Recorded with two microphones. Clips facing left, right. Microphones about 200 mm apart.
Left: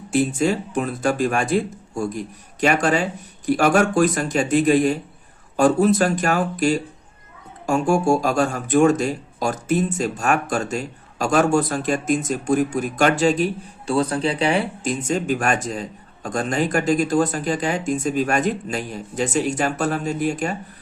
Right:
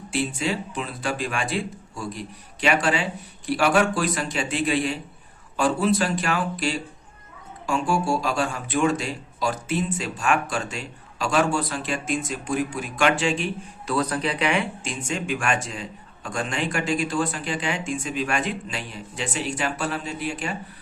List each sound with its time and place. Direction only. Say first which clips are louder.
0.1 s speech: left 7 dB; 45° left (ahead or behind)